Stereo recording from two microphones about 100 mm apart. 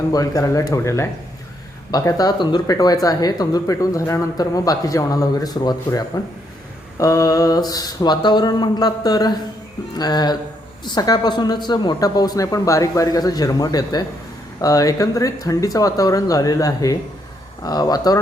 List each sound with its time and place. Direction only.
0.1 s speech: 35° left (ahead or behind)
7.0 s speech: 35° left (ahead or behind)